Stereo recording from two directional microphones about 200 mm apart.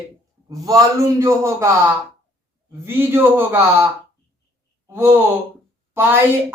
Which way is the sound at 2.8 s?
10° right (ahead or behind).